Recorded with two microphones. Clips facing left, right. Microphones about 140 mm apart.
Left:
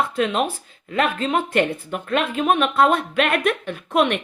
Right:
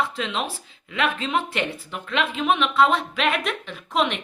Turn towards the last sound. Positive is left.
turn(degrees=55)  # may be behind; listen again after turning